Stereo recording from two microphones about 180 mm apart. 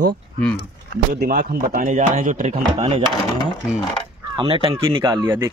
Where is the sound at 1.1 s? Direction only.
50° right (ahead or behind); by 3.0 s 35° right (ahead or behind).